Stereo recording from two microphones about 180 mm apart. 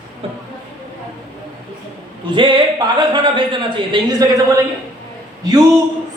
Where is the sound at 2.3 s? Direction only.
25° right (ahead or behind).